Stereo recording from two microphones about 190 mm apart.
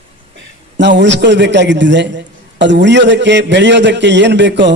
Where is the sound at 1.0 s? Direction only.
70° right (ahead or behind).